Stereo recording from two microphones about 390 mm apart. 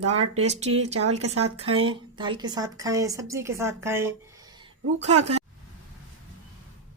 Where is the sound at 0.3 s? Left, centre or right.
Centre.